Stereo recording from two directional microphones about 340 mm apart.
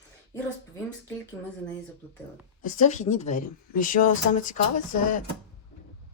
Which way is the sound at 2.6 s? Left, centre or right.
Left.